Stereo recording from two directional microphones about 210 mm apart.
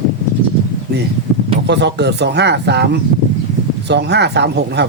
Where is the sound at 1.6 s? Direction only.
55° right (ahead or behind).